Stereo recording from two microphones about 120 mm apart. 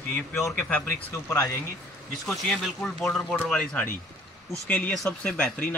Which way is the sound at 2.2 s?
Centre (ahead or behind).